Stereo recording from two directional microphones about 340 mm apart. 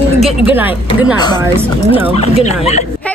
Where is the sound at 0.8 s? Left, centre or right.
Centre.